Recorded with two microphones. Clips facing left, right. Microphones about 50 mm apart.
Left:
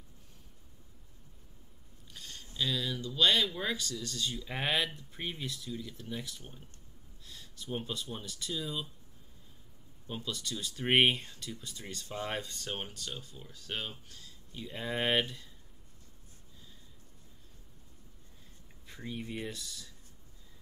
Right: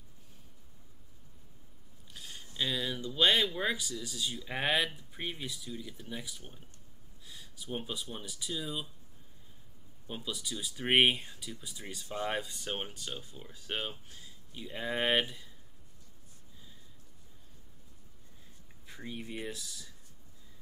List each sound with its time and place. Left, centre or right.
2.0 s a sound: centre
2.4 s speech: right; by 8.8 s centre
10.0 s speech: centre
19.0 s speech: centre